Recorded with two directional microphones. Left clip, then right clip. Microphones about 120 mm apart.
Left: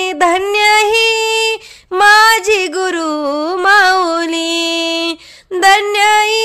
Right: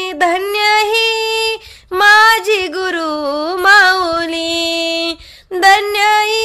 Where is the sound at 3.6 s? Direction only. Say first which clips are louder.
Right 1 dB; 20° left (ahead or behind).